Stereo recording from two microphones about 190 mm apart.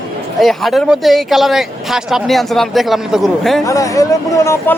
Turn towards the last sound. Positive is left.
turn(degrees=15)  # may be behind; listen again after turning